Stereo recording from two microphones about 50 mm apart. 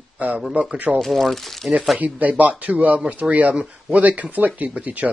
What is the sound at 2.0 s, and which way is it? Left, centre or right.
Speech, right.